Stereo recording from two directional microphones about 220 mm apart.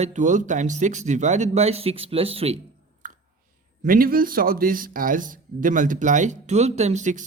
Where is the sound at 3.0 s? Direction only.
35° right (ahead or behind).